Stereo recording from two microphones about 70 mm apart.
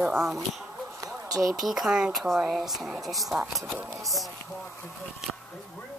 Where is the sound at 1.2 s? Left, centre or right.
Right.